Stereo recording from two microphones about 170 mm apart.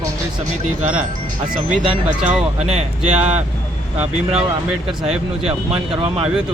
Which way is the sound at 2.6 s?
40° right (ahead or behind).